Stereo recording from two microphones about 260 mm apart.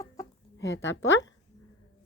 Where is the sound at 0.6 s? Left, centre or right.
Left.